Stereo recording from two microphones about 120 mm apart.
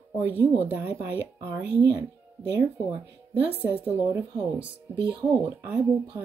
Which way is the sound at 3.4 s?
15° right (ahead or behind).